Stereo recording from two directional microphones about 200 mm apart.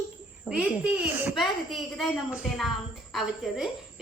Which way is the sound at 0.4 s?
5° right (ahead or behind).